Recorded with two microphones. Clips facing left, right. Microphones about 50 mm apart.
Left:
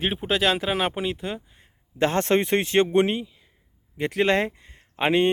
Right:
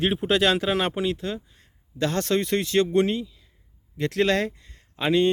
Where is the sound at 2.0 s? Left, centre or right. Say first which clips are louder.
Left 3 dB; left.